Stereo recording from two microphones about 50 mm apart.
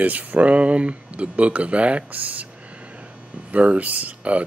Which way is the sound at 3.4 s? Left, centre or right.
Right.